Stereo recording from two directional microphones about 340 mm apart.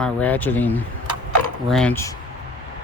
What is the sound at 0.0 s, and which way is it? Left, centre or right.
Speech, centre.